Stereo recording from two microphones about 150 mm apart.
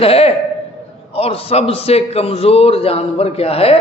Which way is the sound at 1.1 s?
40° left (ahead or behind).